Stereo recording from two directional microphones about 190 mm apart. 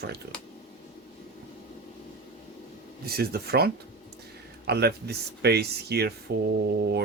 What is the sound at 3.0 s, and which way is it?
Speech, 55° right (ahead or behind).